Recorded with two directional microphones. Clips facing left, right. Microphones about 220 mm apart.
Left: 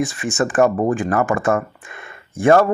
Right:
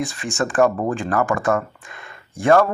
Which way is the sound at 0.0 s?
20° left (ahead or behind).